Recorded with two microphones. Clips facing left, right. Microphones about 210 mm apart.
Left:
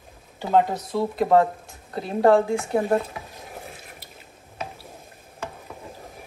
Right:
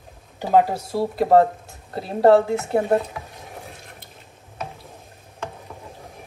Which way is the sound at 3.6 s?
5° left (ahead or behind).